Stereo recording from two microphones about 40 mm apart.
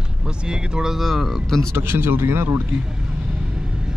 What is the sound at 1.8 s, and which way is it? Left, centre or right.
Speech, right.